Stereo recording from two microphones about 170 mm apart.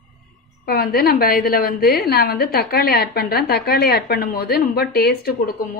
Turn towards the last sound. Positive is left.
turn(degrees=65)  # may be behind; listen again after turning